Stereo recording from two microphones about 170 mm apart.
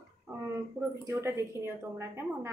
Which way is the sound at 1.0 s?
15° right (ahead or behind).